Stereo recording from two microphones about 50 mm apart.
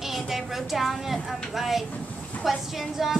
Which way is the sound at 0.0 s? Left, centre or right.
Centre.